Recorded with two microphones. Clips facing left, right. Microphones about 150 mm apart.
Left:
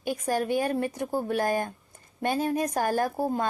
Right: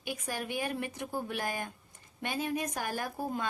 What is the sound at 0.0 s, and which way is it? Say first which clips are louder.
Speech: left 10 dB; 40° left (ahead or behind).